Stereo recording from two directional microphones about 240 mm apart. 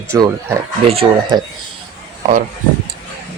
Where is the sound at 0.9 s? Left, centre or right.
Right.